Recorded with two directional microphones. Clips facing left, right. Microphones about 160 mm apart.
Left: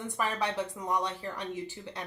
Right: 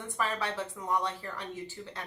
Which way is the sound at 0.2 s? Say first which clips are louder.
Left 1 dB; 15° left (ahead or behind).